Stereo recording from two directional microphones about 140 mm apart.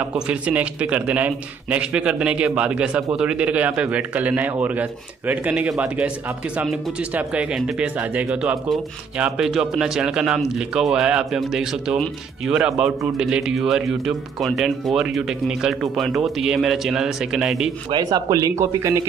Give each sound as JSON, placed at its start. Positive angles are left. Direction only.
{"t": 0.0, "sound": "a man's voice", "side_deg": -10}
{"t": 17.9, "sound": "speech", "side_deg": -25}